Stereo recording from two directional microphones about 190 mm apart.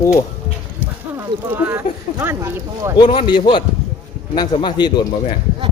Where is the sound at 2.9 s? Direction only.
25° left (ahead or behind).